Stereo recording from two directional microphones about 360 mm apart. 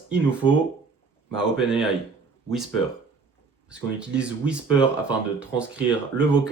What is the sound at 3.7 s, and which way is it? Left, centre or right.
Speech, centre.